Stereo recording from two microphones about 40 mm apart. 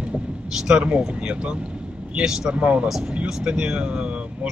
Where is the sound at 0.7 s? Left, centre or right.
Right.